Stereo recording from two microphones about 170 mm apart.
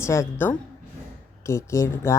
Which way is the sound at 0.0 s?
15° left (ahead or behind).